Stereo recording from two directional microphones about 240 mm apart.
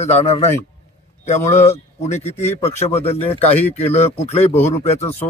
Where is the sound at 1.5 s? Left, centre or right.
Left.